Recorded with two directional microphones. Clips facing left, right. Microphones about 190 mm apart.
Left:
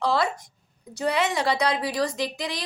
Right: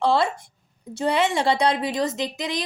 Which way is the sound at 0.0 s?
25° right (ahead or behind).